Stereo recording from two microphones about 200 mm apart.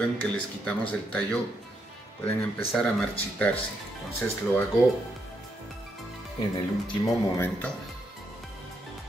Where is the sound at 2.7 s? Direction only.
5° left (ahead or behind).